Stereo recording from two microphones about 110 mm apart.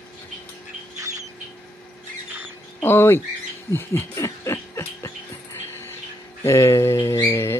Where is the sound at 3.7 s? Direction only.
25° left (ahead or behind).